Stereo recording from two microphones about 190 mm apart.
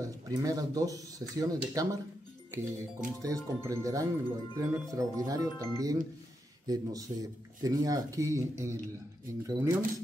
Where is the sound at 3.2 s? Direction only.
15° right (ahead or behind).